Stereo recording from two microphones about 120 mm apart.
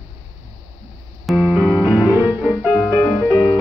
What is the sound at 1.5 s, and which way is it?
Music, 20° left (ahead or behind).